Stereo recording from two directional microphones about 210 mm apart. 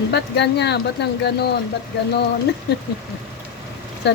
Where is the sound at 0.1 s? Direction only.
55° left (ahead or behind).